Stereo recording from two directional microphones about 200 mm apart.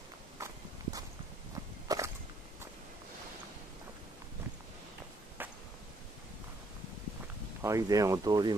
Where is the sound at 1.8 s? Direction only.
15° right (ahead or behind).